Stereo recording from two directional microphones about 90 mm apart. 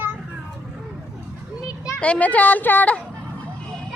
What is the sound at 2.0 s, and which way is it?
Speech, 15° left (ahead or behind).